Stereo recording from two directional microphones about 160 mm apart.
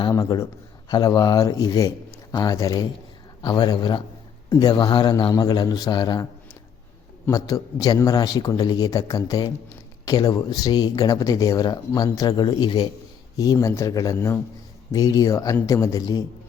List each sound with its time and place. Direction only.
0.1 s speech: 20° left (ahead or behind)
7.3 s speech: 20° left (ahead or behind)